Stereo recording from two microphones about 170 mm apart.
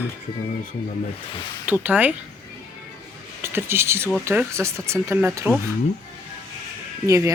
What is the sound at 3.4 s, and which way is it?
Speech, 15° right (ahead or behind).